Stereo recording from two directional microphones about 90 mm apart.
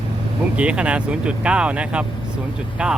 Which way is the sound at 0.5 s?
15° right (ahead or behind).